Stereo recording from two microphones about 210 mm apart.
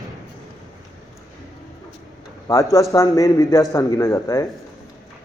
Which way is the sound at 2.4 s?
15° left (ahead or behind).